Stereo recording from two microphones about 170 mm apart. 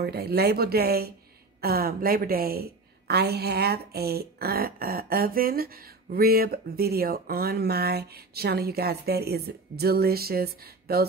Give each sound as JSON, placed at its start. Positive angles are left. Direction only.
{"t": 0.0, "sound": "a woman's voice", "side_deg": -70}